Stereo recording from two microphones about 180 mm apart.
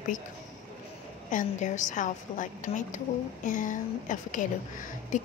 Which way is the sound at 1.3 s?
45° left (ahead or behind).